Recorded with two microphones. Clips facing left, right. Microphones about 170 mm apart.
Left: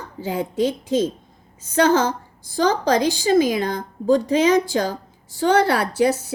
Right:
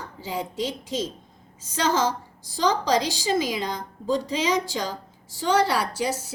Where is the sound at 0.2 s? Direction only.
55° left (ahead or behind).